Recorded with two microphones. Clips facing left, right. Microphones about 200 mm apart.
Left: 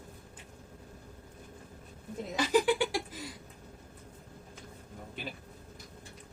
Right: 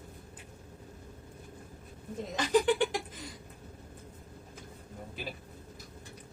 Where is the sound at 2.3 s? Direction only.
10° left (ahead or behind).